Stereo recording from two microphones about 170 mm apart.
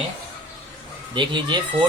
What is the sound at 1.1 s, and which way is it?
Speech, 30° right (ahead or behind).